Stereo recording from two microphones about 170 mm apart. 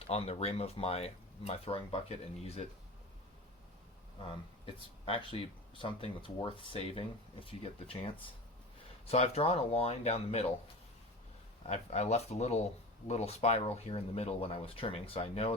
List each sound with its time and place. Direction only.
0.1 s speech: 40° left (ahead or behind)
4.2 s speech: 30° left (ahead or behind)
11.6 s speech: 40° left (ahead or behind)